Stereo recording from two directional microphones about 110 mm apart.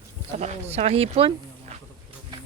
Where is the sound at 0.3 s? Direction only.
85° right; by 1.3 s 65° right (ahead or behind).